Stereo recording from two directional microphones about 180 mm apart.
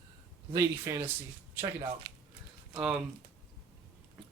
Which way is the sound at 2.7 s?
5° right (ahead or behind).